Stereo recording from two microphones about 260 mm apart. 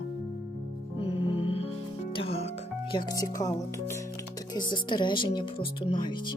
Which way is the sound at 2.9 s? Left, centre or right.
Centre.